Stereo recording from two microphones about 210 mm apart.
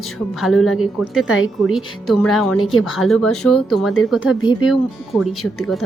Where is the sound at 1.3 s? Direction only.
70° left (ahead or behind).